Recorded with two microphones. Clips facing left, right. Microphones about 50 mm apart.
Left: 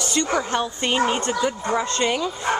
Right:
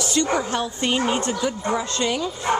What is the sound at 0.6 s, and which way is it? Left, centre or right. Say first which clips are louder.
Speech: left 1 dB; centre.